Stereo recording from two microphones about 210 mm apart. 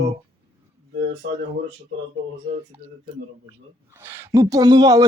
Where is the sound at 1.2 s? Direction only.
55° right (ahead or behind).